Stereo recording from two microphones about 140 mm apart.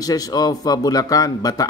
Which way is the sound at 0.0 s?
25° left (ahead or behind).